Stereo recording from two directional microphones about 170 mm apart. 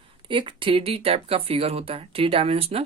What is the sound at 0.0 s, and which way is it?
Speech, 30° right (ahead or behind).